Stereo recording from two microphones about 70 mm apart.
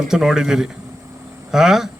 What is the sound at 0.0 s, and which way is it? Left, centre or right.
A man's voice, centre.